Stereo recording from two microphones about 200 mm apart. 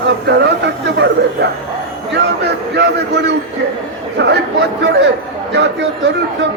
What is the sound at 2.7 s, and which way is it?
Speech, 60° right (ahead or behind).